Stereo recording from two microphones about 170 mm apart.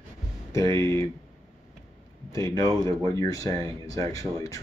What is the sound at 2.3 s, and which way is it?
Speech, 15° left (ahead or behind).